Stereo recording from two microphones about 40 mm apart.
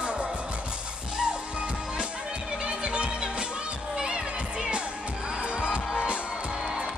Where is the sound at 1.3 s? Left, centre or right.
Right.